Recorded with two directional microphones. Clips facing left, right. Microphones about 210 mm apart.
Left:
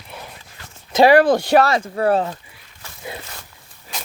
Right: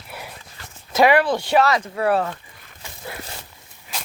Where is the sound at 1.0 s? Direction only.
40° left (ahead or behind).